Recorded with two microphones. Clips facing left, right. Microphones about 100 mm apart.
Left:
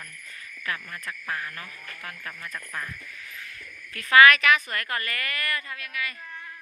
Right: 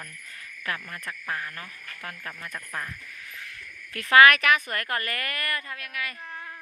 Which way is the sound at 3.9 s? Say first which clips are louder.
Even; 50° right (ahead or behind).